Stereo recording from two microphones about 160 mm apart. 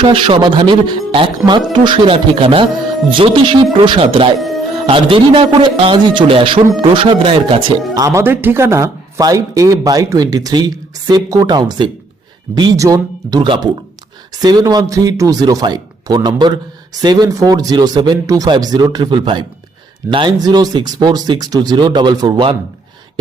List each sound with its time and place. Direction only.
0.0 s speech: 35° right (ahead or behind)
4.4 s music: centre (ahead or behind)
4.9 s speech: 35° right (ahead or behind)
7.9 s speech: 20° right (ahead or behind)